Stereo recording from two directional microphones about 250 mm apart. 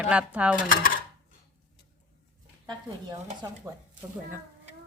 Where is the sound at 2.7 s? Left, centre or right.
Centre.